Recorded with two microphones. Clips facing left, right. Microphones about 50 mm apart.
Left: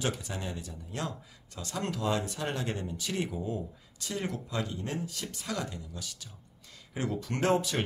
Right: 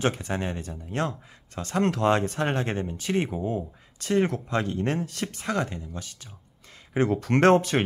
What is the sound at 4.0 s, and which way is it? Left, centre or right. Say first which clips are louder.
Speech: right 11 dB; right.